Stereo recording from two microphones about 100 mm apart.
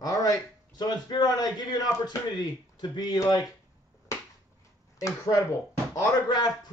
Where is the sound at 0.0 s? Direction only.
40° left (ahead or behind).